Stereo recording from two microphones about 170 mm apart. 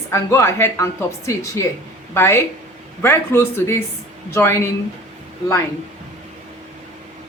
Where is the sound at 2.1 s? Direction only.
15° left (ahead or behind).